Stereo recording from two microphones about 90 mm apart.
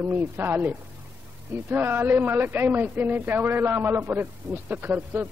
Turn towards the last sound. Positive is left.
turn(degrees=-20)  # may be behind; listen again after turning